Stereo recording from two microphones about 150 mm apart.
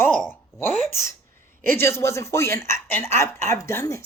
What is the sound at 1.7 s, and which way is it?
Speech, 15° left (ahead or behind).